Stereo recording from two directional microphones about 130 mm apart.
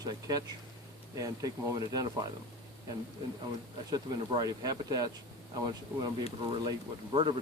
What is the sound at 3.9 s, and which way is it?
Speech, 30° right (ahead or behind).